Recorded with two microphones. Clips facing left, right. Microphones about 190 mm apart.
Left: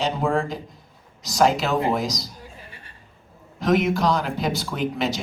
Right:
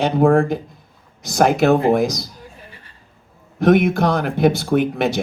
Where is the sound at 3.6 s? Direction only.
55° right (ahead or behind).